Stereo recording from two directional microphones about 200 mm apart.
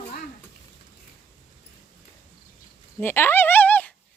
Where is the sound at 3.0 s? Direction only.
10° left (ahead or behind).